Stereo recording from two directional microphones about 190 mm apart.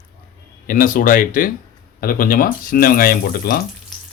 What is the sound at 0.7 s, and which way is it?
Speech, 45° left (ahead or behind).